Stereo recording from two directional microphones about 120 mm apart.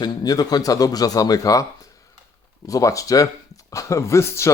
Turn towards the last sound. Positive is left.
turn(degrees=25)  # may be behind; listen again after turning